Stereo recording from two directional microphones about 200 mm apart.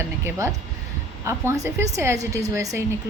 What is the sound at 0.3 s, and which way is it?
A woman's voice, 15° right (ahead or behind).